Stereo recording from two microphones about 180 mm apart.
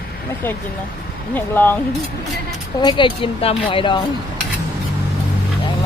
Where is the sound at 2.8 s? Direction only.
25° left (ahead or behind).